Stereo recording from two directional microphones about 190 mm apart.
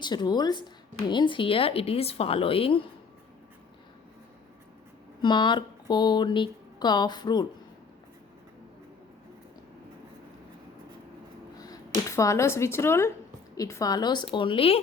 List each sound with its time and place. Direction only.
0.0 s a woman's voice: 20° left (ahead or behind)
5.2 s a woman's voice: 25° left (ahead or behind)
11.6 s a woman's voice: 15° left (ahead or behind)